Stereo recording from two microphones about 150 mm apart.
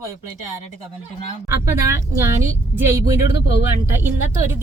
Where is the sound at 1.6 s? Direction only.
20° right (ahead or behind).